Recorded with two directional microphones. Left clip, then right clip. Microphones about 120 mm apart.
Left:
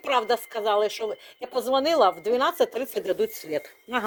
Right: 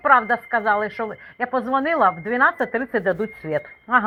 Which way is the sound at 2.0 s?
30° left (ahead or behind).